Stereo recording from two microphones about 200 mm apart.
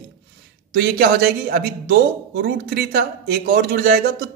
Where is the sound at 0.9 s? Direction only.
50° right (ahead or behind).